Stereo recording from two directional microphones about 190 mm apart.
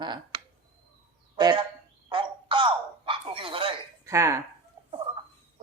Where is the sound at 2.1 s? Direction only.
25° right (ahead or behind).